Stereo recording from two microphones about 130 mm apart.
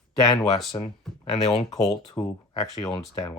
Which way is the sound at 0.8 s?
50° left (ahead or behind).